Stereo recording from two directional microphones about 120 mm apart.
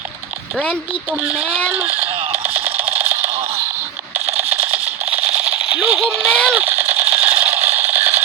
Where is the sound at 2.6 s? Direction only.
15° right (ahead or behind).